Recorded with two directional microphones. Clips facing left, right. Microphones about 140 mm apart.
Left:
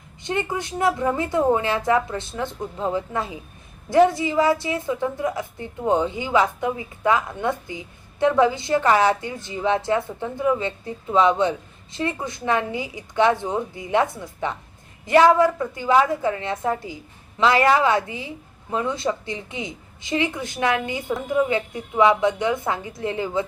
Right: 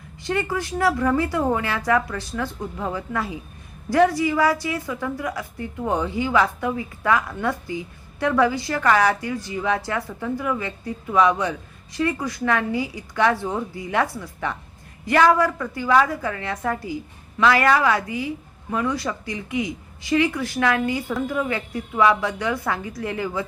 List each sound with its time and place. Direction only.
0.2 s a woman's voice: 20° left (ahead or behind)